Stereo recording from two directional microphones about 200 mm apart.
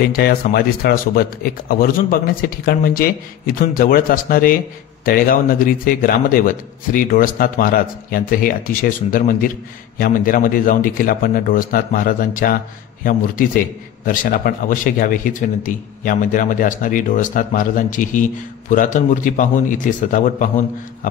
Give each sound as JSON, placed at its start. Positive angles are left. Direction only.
{"t": 0.0, "sound": "speech", "side_deg": 50}
{"t": 14.0, "sound": "speech", "side_deg": 45}